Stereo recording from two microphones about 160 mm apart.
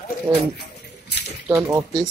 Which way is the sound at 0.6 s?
90° left.